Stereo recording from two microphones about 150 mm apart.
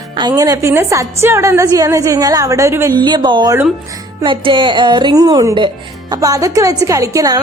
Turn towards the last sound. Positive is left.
turn(degrees=-25)  # may be behind; listen again after turning